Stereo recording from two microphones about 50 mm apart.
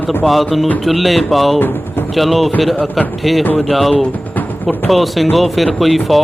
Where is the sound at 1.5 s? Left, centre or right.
Left.